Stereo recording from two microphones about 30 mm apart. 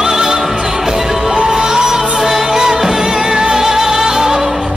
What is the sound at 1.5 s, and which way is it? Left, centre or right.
Music, right.